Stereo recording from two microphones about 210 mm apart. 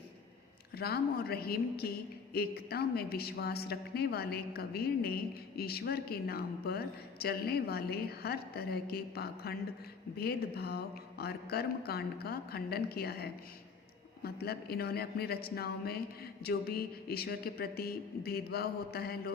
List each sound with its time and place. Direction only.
0.8 s a woman's voice: 50° left (ahead or behind)